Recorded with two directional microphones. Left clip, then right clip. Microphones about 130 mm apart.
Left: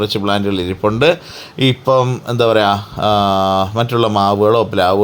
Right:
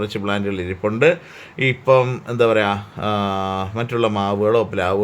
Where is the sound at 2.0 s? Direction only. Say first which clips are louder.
Left 3 dB; 35° left (ahead or behind).